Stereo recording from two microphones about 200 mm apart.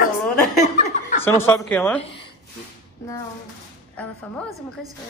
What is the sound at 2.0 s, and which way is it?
Speech, 30° left (ahead or behind).